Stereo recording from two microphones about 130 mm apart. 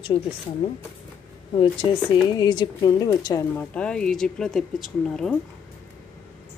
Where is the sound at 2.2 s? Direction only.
35° left (ahead or behind).